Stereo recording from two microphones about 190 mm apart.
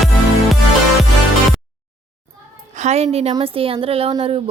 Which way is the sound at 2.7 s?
35° right (ahead or behind).